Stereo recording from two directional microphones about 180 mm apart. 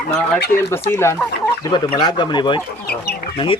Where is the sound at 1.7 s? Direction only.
25° left (ahead or behind).